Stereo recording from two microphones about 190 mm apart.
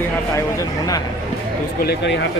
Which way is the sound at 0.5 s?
20° left (ahead or behind).